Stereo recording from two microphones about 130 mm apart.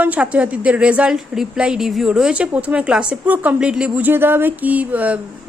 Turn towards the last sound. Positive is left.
turn(degrees=-10)  # may be behind; listen again after turning